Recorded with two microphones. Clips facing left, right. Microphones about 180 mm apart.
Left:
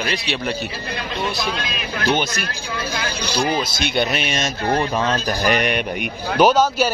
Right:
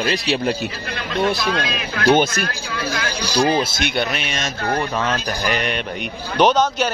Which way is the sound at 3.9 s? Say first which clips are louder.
Left 5 dB; 20° left (ahead or behind).